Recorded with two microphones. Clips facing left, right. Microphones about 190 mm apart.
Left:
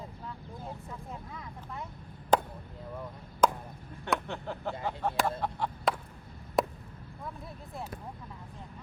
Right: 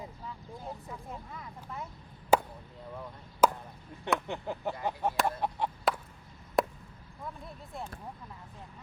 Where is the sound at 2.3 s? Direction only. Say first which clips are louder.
Right 1 dB; 5° right (ahead or behind).